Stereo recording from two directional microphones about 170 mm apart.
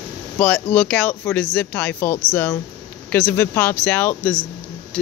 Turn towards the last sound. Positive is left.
turn(degrees=10)  # may be behind; listen again after turning